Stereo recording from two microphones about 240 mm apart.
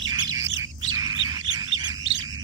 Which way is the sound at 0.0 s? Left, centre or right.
Centre.